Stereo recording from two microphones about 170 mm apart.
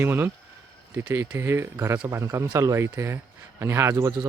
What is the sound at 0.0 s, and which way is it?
Speech, 10° right (ahead or behind).